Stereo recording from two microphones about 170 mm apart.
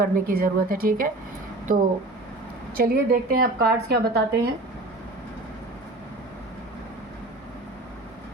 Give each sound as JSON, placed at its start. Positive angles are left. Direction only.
{"t": 0.0, "sound": "a woman's voice", "side_deg": -60}